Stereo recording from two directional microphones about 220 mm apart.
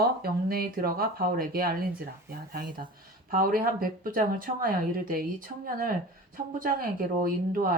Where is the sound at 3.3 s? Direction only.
40° right (ahead or behind).